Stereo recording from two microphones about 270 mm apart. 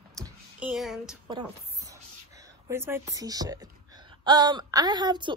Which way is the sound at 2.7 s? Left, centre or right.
Centre.